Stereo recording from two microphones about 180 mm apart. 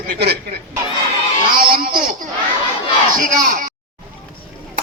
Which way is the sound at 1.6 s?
50° right (ahead or behind).